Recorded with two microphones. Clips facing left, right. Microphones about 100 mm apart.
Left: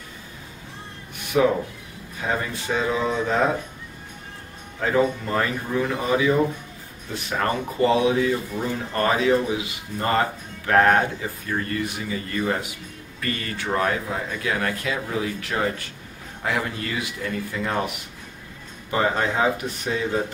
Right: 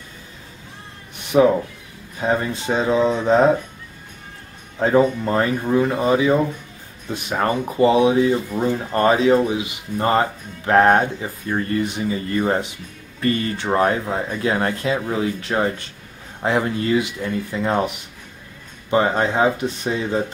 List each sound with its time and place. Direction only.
1.1 s cat: 25° right (ahead or behind)
2.1 s speech: 25° right (ahead or behind)
4.7 s speech: 30° right (ahead or behind)